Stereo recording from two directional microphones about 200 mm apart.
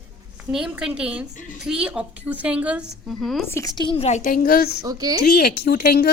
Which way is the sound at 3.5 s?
15° left (ahead or behind).